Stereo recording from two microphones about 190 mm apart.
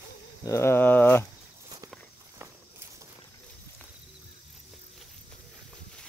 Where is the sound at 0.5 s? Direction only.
15° left (ahead or behind).